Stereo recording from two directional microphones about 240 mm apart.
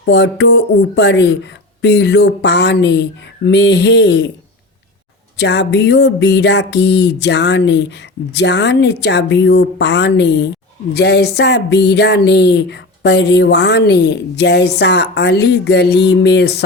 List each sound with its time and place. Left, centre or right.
0.0 s speech: left
5.4 s speech: left